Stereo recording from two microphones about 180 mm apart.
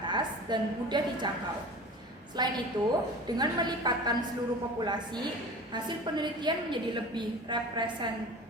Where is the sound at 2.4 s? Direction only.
25° right (ahead or behind).